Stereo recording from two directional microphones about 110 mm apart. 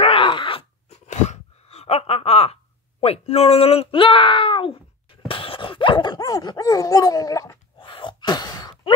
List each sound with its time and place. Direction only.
0.0 s groan: 55° left (ahead or behind)
0.8 s a sound: 90° left; by 4.7 s 50° left (ahead or behind)
5.3 s speech: 50° left (ahead or behind); by 7.5 s 30° left (ahead or behind)
7.8 s cough: 50° left (ahead or behind)